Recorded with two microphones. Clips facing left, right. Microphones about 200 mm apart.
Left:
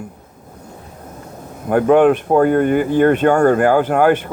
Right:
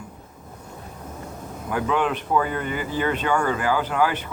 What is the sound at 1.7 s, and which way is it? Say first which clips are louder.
Speech: left 12 dB; 55° left (ahead or behind).